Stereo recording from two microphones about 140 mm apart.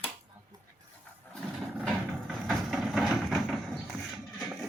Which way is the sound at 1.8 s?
Centre (ahead or behind).